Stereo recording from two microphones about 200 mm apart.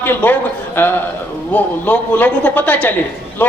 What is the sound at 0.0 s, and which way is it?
A man's voice, 10° left (ahead or behind).